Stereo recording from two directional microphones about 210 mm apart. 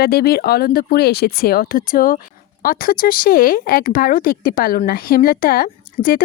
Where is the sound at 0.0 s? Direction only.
50° left (ahead or behind).